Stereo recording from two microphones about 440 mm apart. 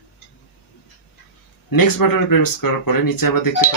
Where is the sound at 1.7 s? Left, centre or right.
Left.